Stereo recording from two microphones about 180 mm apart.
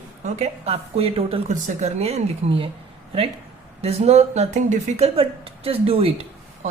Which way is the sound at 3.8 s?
35° right (ahead or behind).